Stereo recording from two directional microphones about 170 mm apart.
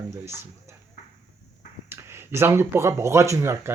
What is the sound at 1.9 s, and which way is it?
Speech, 15° right (ahead or behind).